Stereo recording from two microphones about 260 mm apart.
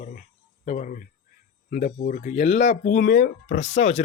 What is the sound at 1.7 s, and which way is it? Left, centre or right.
Speech, left.